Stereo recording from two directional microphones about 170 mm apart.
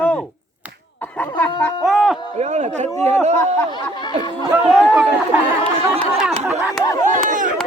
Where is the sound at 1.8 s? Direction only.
Centre (ahead or behind).